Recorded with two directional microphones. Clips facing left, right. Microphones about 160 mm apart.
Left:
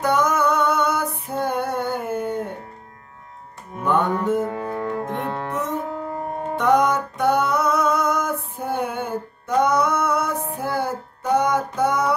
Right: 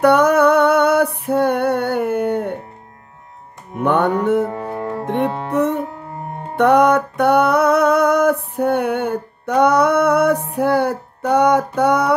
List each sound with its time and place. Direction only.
0.0 s a sound: 65° right (ahead or behind)
3.8 s music: 70° right (ahead or behind)
4.5 s music: 30° right (ahead or behind)
5.0 s music: 65° right (ahead or behind)